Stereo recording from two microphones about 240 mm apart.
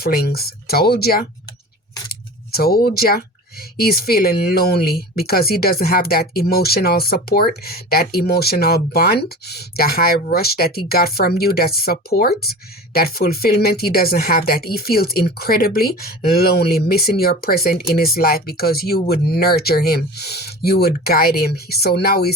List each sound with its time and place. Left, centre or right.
0.0 s speech: left
2.5 s speech: left